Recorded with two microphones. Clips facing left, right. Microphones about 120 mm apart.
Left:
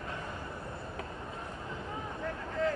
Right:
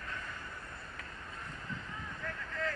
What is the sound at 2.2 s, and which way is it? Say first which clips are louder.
Vehicle: left 7 dB; 25° left (ahead or behind).